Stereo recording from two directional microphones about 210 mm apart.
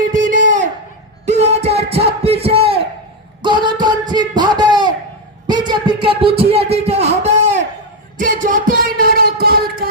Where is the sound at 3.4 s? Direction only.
20° right (ahead or behind).